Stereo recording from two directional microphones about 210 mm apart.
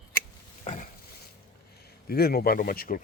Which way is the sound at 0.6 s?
35° left (ahead or behind).